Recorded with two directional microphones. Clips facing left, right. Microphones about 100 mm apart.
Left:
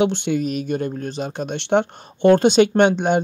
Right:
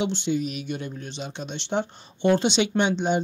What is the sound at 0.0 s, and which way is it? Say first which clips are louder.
Speech: left 6 dB; 60° left (ahead or behind).